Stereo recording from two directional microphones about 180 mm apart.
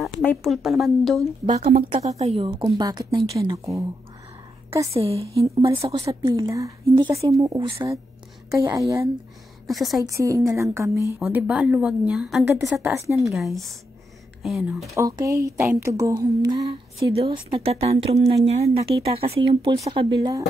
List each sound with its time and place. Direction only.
0.0 s speech: 5° left (ahead or behind)
1.4 s a woman's voice: 40° right (ahead or behind); by 3.8 s 15° right (ahead or behind)
4.9 s a woman's voice: 30° right (ahead or behind)
6.3 s a woman's voice: 20° right (ahead or behind)
9.7 s speech: centre (ahead or behind)
10.0 s speech: 20° right (ahead or behind)
11.1 s speech: 5° right (ahead or behind)
12.7 s speech: 15° right (ahead or behind)
13.2 s speech: centre (ahead or behind)
15.0 s speech: 20° right (ahead or behind)
16.6 s a woman's voice: 30° right (ahead or behind)